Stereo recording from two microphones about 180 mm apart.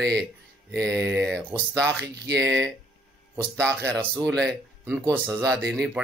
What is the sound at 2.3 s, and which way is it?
Speech, 75° right (ahead or behind).